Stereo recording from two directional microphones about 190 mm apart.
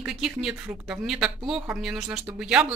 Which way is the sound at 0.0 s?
5° right (ahead or behind).